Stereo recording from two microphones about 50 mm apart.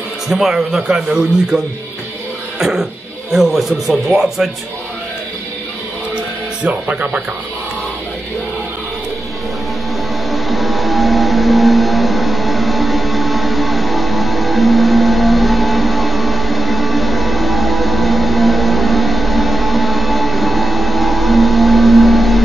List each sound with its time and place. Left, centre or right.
0.3 s speech: centre
2.6 s speech: centre
6.6 s speech: right
10.3 s music: centre